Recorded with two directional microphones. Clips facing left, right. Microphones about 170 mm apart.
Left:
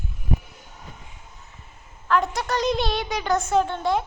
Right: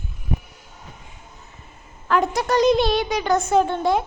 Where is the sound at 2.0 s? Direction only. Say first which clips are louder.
Right 3 dB; 5° right (ahead or behind).